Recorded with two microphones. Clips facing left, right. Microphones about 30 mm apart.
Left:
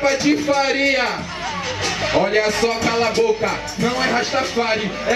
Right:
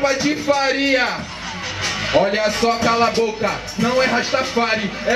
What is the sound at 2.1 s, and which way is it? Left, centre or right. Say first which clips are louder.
Speech: right 1 dB; centre.